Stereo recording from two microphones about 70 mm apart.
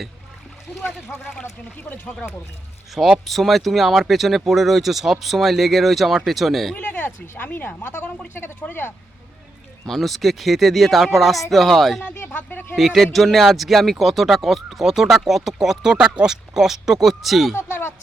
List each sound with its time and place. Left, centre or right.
1.0 s speech: left
2.9 s speech: centre
6.7 s speech: left
9.8 s speech: centre
12.1 s a sound: left
12.4 s speech: left
12.7 s speech: centre
17.5 s a sound: left